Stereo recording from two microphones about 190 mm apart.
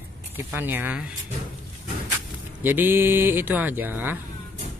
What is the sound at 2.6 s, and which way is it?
Speech, 10° right (ahead or behind).